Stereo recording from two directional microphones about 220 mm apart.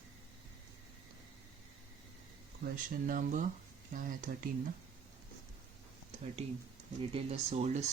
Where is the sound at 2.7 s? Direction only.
40° right (ahead or behind).